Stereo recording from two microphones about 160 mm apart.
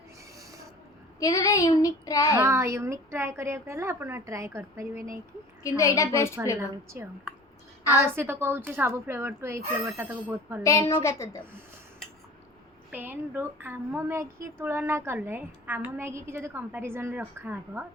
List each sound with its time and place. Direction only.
1.2 s child singing: 20° left (ahead or behind)
2.4 s speech: 15° right (ahead or behind)
5.6 s child singing: 20° left (ahead or behind)
6.6 s speech: 15° right (ahead or behind)
10.6 s child singing: 20° left (ahead or behind)
12.9 s speech: 10° right (ahead or behind)